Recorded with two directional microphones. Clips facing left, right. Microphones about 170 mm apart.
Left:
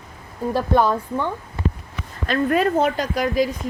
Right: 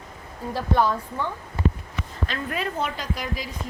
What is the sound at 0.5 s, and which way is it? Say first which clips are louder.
Speech: left 4 dB; 55° left (ahead or behind).